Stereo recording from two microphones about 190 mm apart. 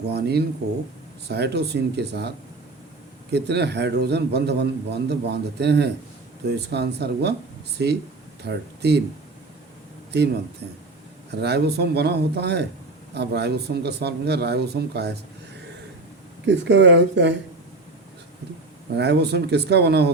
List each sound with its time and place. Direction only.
0.1 s a man's voice: 60° right (ahead or behind)
3.3 s a man's voice: 60° right (ahead or behind)
8.4 s a man's voice: 60° right (ahead or behind)
11.3 s a man's voice: 60° right (ahead or behind)
16.5 s speech: 70° right (ahead or behind)
18.9 s a man's voice: 60° right (ahead or behind)